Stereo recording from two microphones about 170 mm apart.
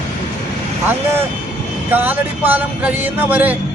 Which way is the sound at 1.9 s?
10° right (ahead or behind).